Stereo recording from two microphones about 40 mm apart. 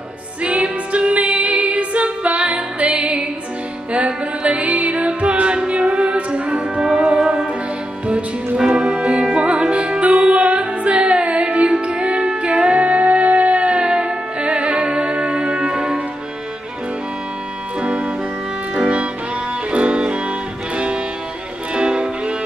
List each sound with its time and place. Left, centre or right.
0.4 s music: right
8.5 s music: right
13.7 s music: right
17.7 s music: right